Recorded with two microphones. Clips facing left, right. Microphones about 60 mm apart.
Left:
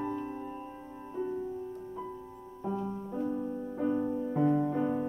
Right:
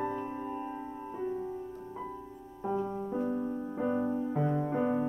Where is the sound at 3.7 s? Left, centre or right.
Right.